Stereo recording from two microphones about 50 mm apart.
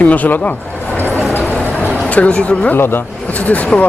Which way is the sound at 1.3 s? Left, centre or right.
Left.